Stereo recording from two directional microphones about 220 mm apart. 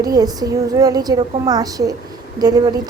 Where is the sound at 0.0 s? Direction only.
15° right (ahead or behind).